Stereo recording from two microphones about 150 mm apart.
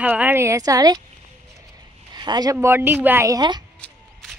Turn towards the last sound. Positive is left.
turn(degrees=-30)  # may be behind; listen again after turning